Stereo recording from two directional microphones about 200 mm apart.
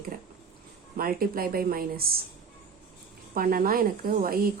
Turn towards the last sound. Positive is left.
turn(degrees=-45)  # may be behind; listen again after turning